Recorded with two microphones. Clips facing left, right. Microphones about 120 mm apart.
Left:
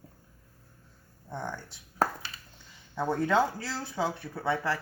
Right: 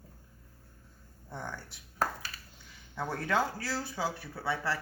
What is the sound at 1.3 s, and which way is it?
Speech, 20° left (ahead or behind).